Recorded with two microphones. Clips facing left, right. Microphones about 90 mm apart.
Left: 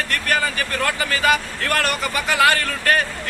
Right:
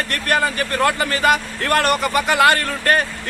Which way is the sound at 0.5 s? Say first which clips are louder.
Right 4 dB; 35° right (ahead or behind).